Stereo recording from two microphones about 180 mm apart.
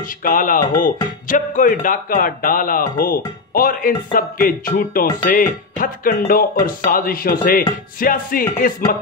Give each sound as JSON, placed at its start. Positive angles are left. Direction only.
{"t": 0.0, "sound": "a man's voice", "side_deg": 50}